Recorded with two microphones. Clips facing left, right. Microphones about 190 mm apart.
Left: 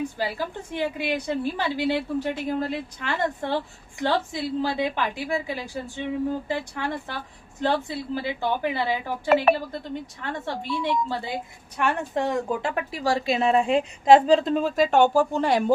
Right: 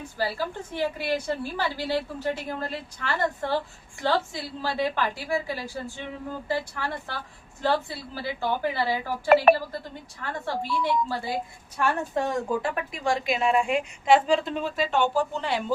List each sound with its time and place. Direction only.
0.2 s a woman's voice: 15° left (ahead or behind)
9.3 s speech: 55° right (ahead or behind)
9.6 s a woman's voice: 20° left (ahead or behind); by 15.7 s 45° left (ahead or behind)